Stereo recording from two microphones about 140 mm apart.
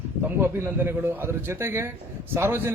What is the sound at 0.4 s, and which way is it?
A man's voice, 15° right (ahead or behind).